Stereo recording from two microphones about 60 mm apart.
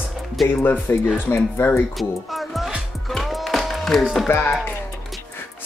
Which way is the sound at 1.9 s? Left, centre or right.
Centre.